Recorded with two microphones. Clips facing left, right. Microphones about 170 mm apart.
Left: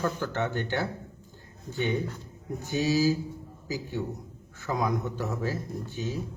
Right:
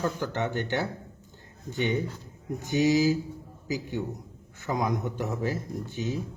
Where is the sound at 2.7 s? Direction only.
15° right (ahead or behind).